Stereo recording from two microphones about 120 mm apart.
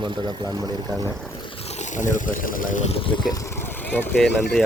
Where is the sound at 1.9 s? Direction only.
90° left.